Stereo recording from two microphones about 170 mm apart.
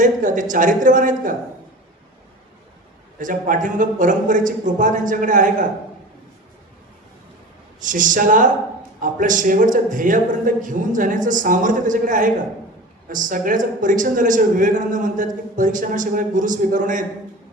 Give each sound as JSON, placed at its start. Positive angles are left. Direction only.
{"t": 0.0, "sound": "a woman's voice", "side_deg": -50}
{"t": 3.2, "sound": "a woman's voice", "side_deg": -50}
{"t": 7.8, "sound": "a woman's voice", "side_deg": -50}